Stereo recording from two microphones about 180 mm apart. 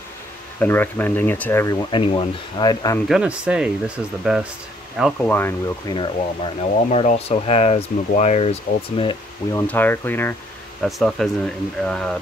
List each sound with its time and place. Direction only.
0.6 s speech: 10° left (ahead or behind)
1.9 s speech: 30° left (ahead or behind)
3.1 s speech: 5° right (ahead or behind)
5.9 s speech: 30° left (ahead or behind)
9.5 s speech: 15° left (ahead or behind)